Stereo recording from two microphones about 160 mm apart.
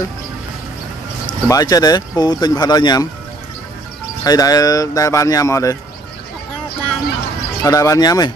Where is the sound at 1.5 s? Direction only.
25° left (ahead or behind).